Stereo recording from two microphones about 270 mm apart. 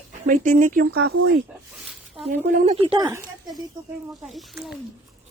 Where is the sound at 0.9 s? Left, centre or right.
Right.